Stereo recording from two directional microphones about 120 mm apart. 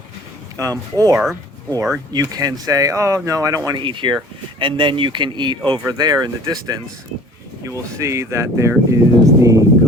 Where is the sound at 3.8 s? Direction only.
45° right (ahead or behind); by 8.7 s 25° right (ahead or behind).